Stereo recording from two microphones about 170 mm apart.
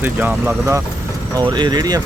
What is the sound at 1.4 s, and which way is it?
Speech, 25° right (ahead or behind).